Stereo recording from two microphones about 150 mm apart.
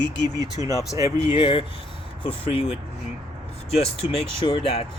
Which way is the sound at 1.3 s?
35° left (ahead or behind).